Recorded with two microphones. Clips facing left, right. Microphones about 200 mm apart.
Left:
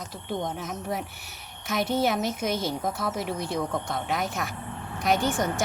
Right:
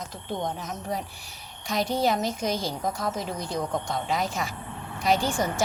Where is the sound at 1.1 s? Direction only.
65° left (ahead or behind).